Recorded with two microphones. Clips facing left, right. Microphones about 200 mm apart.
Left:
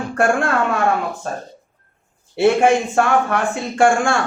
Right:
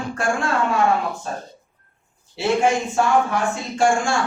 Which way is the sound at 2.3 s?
60° left (ahead or behind).